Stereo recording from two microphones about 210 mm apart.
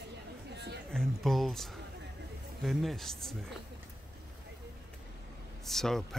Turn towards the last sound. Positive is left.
turn(degrees=0)  # may be behind; listen again after turning